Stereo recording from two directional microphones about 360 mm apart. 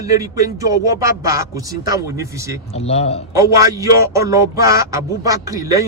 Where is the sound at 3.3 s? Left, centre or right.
Centre.